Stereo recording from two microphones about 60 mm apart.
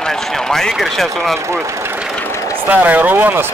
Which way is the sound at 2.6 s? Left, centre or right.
Right.